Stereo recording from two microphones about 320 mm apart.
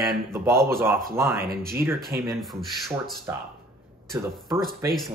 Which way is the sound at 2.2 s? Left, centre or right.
Centre.